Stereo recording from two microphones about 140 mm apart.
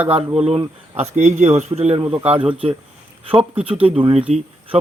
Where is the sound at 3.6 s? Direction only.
40° right (ahead or behind).